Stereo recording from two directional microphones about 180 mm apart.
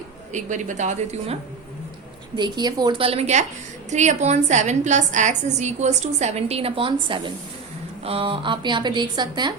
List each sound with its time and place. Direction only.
0.3 s a woman's voice: 40° right (ahead or behind)
2.3 s a woman's voice: 25° right (ahead or behind)